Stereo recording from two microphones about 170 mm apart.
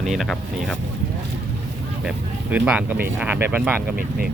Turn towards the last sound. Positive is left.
turn(degrees=-60)  # may be behind; listen again after turning